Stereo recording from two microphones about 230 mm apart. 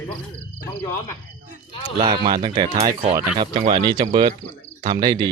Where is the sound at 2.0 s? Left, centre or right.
Right.